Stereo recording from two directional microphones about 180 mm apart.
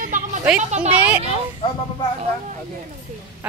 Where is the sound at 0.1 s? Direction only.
45° right (ahead or behind).